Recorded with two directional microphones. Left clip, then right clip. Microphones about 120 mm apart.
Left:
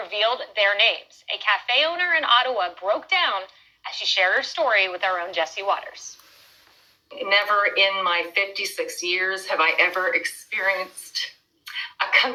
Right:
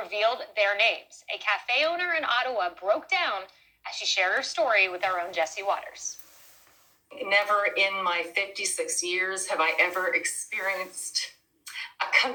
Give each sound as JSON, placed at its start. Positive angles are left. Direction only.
{"t": 0.0, "sound": "a woman's voice", "side_deg": 25}
{"t": 7.1, "sound": "a woman's voice", "side_deg": 25}